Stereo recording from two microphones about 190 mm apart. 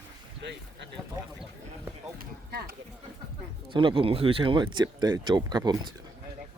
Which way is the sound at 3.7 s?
25° right (ahead or behind).